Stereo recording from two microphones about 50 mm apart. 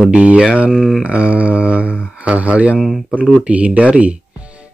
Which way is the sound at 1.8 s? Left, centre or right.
Left.